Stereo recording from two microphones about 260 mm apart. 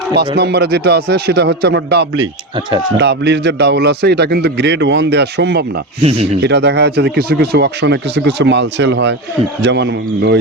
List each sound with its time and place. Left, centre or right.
0.3 s a man's voice: right
2.6 s speech: centre
3.0 s a man's voice: right
6.0 s speech: right
6.4 s a man's voice: right